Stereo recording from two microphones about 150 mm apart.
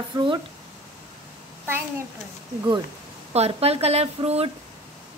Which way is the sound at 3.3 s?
45° right (ahead or behind).